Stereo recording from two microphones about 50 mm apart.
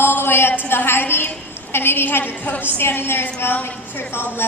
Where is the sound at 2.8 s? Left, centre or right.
Left.